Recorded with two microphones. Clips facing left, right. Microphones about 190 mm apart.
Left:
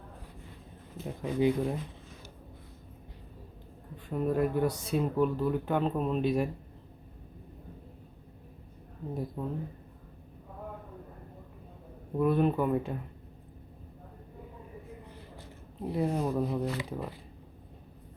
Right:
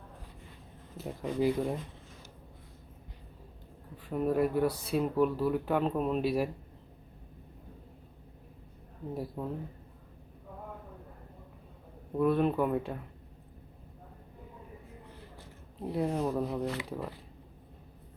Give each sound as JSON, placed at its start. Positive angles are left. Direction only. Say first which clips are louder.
{"t": 1.2, "sound": "speech", "louder": "left 2 dB", "side_deg": 0}
{"t": 3.9, "sound": "speech", "louder": "even", "side_deg": -5}
{"t": 9.1, "sound": "speech", "louder": "left 1 dB", "side_deg": -5}
{"t": 12.1, "sound": "speech", "louder": "left 1 dB", "side_deg": 0}
{"t": 15.9, "sound": "speech", "louder": "left 1 dB", "side_deg": 5}